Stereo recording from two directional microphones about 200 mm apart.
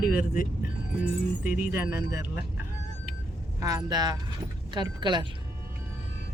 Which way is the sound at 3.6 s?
15° right (ahead or behind).